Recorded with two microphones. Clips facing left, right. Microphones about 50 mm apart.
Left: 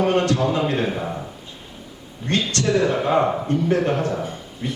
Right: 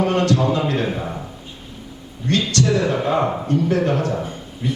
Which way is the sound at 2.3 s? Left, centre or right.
Left.